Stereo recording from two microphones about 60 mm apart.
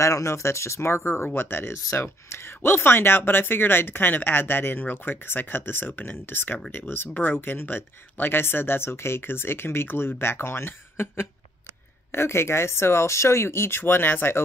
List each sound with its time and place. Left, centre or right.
0.0 s speech: left